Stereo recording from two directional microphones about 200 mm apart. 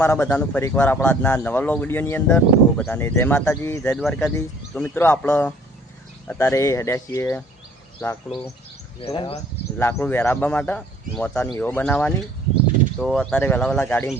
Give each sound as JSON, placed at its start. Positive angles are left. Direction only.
{"t": 0.0, "sound": "speech", "side_deg": 10}
{"t": 3.9, "sound": "speech", "side_deg": 0}
{"t": 9.0, "sound": "speech", "side_deg": 25}
{"t": 9.7, "sound": "speech", "side_deg": 10}